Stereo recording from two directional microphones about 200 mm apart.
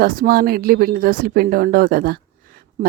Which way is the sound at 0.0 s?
45° right (ahead or behind).